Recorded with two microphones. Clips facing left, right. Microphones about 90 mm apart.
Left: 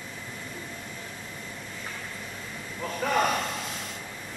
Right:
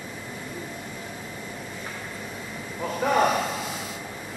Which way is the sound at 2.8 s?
10° right (ahead or behind).